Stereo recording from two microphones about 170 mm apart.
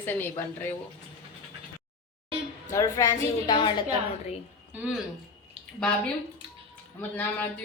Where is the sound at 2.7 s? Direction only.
20° left (ahead or behind).